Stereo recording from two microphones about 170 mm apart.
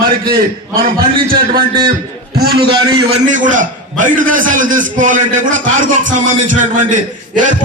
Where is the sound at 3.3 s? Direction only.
50° right (ahead or behind).